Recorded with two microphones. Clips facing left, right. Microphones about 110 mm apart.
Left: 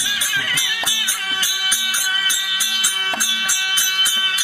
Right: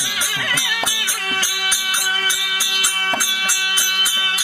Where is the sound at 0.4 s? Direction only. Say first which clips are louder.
Right 3 dB; 55° right (ahead or behind).